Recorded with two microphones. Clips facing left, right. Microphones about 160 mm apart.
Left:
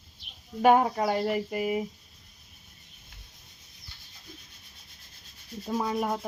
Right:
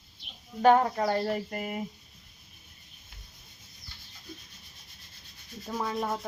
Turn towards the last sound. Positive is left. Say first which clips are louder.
# left 3 dB
turn(degrees=15)  # may be behind; listen again after turning